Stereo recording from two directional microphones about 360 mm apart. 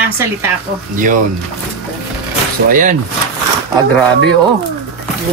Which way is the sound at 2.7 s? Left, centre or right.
Right.